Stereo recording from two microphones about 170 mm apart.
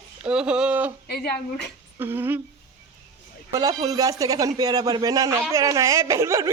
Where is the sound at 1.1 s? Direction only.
70° left (ahead or behind).